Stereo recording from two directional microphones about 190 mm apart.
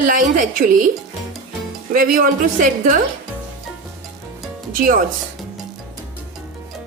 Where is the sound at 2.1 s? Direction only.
45° right (ahead or behind).